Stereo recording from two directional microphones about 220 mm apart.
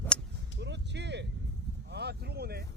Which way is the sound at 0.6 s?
50° right (ahead or behind).